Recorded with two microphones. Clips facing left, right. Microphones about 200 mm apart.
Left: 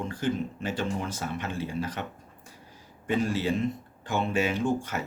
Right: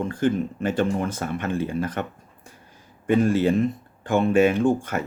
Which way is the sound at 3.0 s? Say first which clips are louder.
Right 8 dB; 55° right (ahead or behind).